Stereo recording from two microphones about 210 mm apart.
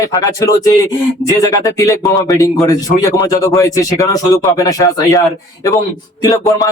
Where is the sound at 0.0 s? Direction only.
15° left (ahead or behind).